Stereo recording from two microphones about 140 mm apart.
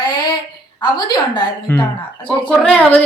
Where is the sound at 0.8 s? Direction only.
30° left (ahead or behind).